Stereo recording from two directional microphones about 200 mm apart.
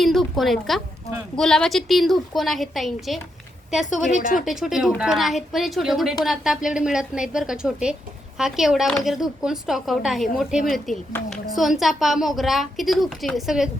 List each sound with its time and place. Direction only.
0.0 s a sound: centre (ahead or behind)
1.4 s a woman's voice: 5° left (ahead or behind)
3.8 s speech: 40° left (ahead or behind)
4.4 s a woman's voice: 5° right (ahead or behind)